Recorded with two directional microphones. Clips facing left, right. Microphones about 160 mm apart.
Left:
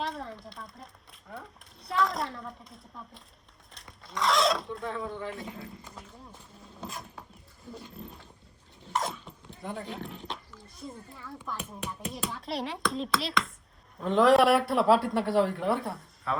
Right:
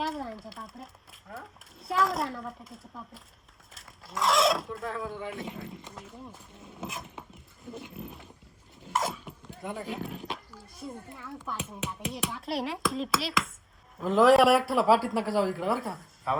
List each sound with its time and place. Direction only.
0.0 s a sound: centre (ahead or behind)
1.3 s speech: centre (ahead or behind)
5.4 s speech: 25° right (ahead or behind)
6.7 s a sound: 20° right (ahead or behind)
7.7 s speech: 20° right (ahead or behind)
8.9 s dog: 5° right (ahead or behind)
10.8 s a child's voice: 5° right (ahead or behind)